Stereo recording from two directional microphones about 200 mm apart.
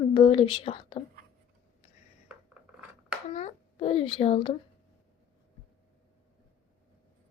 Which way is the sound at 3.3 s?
30° left (ahead or behind).